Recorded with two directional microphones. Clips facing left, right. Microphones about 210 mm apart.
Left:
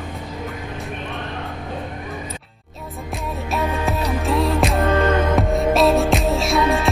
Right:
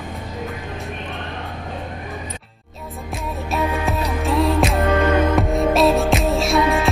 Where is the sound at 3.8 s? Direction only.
Centre (ahead or behind).